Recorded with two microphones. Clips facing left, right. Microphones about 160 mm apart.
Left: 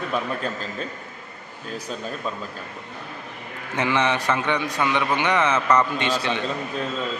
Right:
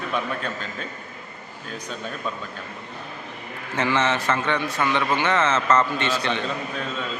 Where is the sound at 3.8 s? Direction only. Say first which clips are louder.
Even; 15° left (ahead or behind).